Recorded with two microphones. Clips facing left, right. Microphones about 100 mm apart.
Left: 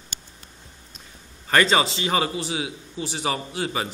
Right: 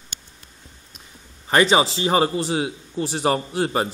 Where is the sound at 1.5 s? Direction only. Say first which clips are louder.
Right 3 dB; 20° right (ahead or behind).